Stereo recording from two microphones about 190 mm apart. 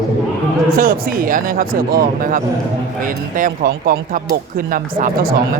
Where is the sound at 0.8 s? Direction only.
45° right (ahead or behind).